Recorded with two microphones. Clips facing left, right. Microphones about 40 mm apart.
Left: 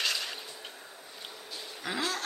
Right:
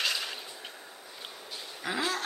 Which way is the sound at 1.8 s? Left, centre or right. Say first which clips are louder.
Right 2 dB; centre.